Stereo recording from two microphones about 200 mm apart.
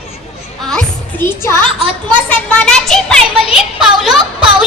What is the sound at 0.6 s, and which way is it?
Music, 5° left (ahead or behind).